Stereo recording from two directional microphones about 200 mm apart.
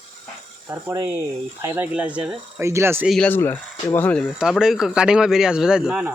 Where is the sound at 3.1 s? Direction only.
5° left (ahead or behind).